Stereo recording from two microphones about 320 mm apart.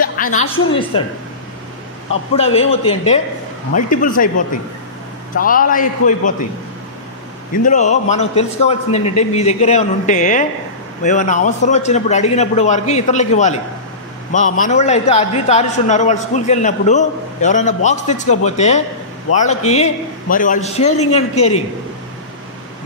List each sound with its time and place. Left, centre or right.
0.0 s a woman's voice: left
2.3 s a man's voice: centre
7.5 s a man's voice: left